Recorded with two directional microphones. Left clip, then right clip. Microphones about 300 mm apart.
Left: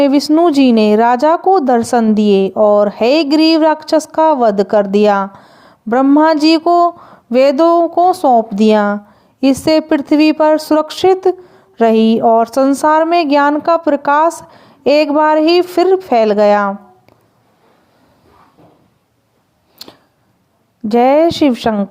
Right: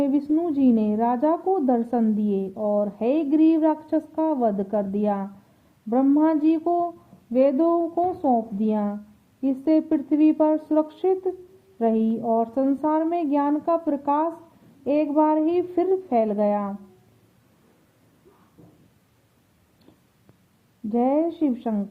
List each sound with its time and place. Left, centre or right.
0.0 s speech: left
2.4 s speech: left
2.8 s speech: left
8.2 s speech: left
20.9 s speech: left